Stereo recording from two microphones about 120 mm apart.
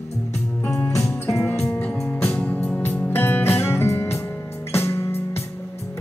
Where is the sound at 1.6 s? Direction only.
10° left (ahead or behind).